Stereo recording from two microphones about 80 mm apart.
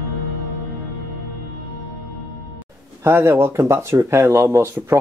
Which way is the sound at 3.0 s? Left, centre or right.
Right.